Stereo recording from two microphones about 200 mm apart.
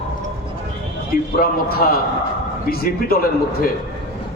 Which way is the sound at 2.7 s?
50° left (ahead or behind).